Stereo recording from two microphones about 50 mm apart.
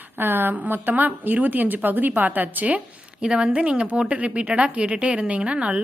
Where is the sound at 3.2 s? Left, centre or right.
Centre.